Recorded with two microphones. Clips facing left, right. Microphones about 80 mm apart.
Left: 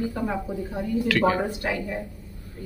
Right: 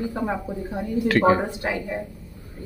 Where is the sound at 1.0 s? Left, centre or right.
Right.